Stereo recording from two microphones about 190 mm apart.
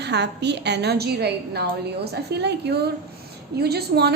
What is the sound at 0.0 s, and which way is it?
A woman's voice, 65° right (ahead or behind).